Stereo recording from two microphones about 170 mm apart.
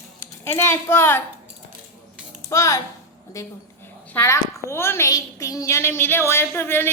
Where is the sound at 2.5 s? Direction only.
15° left (ahead or behind).